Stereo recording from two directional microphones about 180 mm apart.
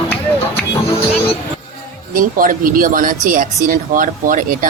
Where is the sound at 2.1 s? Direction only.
50° right (ahead or behind).